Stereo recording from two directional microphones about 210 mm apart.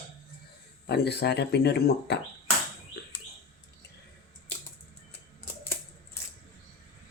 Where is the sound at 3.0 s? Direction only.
50° left (ahead or behind).